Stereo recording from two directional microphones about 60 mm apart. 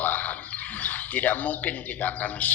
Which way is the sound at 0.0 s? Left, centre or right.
Left.